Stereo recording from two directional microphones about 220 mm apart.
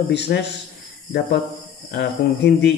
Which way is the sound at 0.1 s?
50° left (ahead or behind).